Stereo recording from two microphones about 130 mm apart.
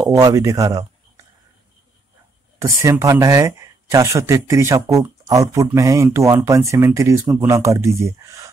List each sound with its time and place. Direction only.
0.0 s speech: 25° right (ahead or behind)
2.6 s speech: 25° right (ahead or behind)